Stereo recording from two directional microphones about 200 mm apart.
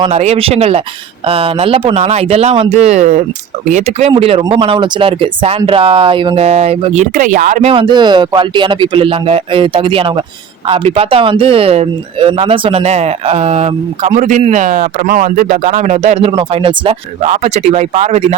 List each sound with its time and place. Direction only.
0.0 s speech: 30° right (ahead or behind)
7.7 s speech: 25° right (ahead or behind)